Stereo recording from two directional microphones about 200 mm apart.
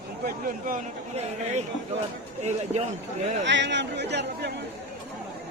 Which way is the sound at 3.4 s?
60° right (ahead or behind).